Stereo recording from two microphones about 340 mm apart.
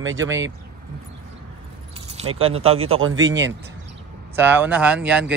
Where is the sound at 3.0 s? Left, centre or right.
Right.